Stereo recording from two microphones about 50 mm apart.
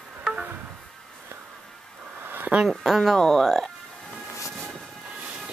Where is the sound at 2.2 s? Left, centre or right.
Right.